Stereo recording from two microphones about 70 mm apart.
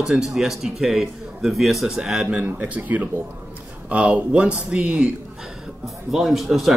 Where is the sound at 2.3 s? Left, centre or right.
Right.